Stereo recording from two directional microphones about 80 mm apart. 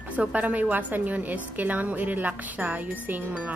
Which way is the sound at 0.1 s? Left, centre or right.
Centre.